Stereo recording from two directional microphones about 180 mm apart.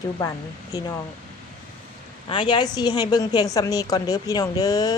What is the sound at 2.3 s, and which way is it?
Speech, 25° left (ahead or behind).